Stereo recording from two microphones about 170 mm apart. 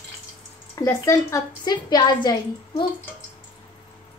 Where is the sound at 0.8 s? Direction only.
15° left (ahead or behind).